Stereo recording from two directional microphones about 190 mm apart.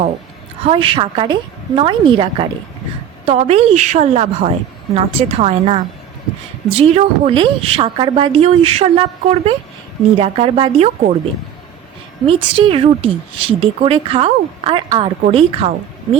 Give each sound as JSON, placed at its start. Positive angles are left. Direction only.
{"t": 0.6, "sound": "a woman's voice", "side_deg": -30}
{"t": 12.2, "sound": "a woman's voice", "side_deg": -30}